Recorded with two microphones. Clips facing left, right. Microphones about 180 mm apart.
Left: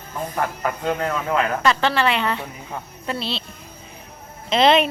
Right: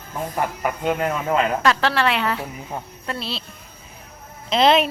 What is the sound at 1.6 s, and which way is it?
Speech, centre (ahead or behind).